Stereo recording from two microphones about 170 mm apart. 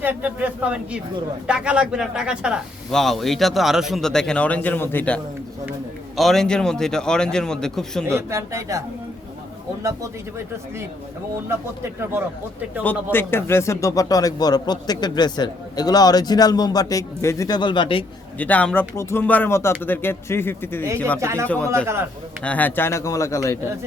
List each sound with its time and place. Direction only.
0.0 s speech: 10° right (ahead or behind)
8.0 s speech: 15° right (ahead or behind)
9.8 s speech: 15° right (ahead or behind)
12.8 s a man's voice: 10° left (ahead or behind); by 18.0 s 30° left (ahead or behind)
18.3 s speech: 10° left (ahead or behind)
21.2 s speech: 15° right (ahead or behind)
21.4 s speech: 10° left (ahead or behind)